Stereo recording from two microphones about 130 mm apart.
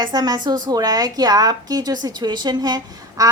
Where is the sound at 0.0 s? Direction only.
30° right (ahead or behind).